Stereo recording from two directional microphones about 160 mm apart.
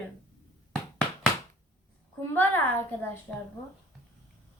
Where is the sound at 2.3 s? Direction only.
10° left (ahead or behind).